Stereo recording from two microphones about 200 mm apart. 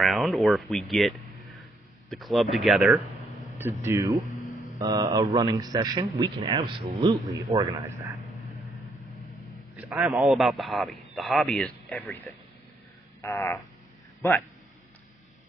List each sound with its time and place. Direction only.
0.0 s speech: centre (ahead or behind)
3.8 s a man's voice: 15° right (ahead or behind)
8.5 s vehicle: centre (ahead or behind)
9.3 s a man's voice: 5° right (ahead or behind)
13.2 s frog: 15° left (ahead or behind)